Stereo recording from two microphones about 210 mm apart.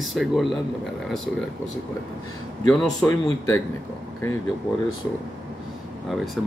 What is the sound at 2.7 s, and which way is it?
Speech, centre (ahead or behind).